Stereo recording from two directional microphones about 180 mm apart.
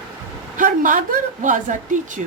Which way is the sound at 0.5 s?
45° right (ahead or behind).